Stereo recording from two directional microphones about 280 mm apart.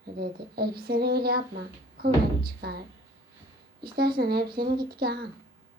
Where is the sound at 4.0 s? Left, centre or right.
Right.